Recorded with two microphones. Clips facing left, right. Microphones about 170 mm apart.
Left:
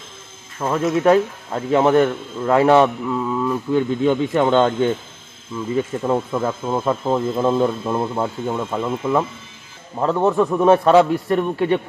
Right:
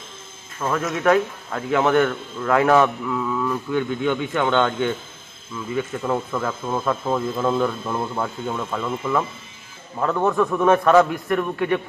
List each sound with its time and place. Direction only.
0.6 s a man's voice: 20° left (ahead or behind)
4.0 s speech: 30° left (ahead or behind)
6.0 s a man's voice: 20° left (ahead or behind)